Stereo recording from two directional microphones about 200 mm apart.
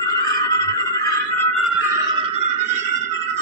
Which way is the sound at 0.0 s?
15° left (ahead or behind).